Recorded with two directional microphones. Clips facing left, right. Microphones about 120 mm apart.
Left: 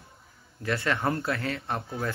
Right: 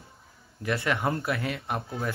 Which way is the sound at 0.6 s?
20° right (ahead or behind).